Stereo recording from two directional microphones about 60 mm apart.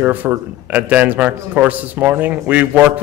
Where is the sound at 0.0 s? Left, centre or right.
Right.